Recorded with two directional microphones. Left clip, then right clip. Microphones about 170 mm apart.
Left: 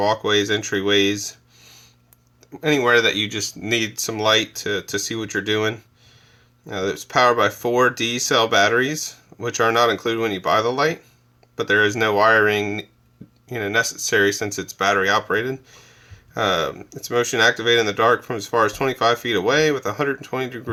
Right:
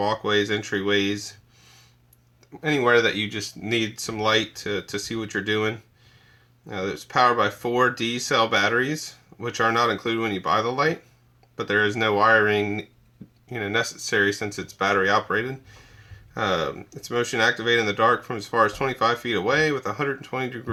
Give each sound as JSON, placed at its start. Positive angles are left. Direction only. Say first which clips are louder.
{"t": 0.0, "sound": "speech", "louder": "left 4 dB", "side_deg": 40}
{"t": 2.5, "sound": "speech", "louder": "left 3 dB", "side_deg": 45}